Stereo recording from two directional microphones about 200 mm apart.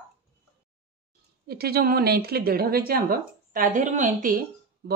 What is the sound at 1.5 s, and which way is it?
A woman's voice, 50° right (ahead or behind).